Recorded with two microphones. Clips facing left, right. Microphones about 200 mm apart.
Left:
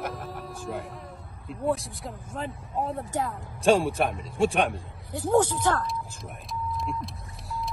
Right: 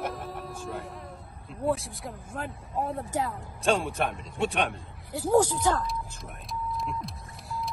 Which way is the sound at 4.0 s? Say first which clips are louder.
Left 4 dB; centre (ahead or behind).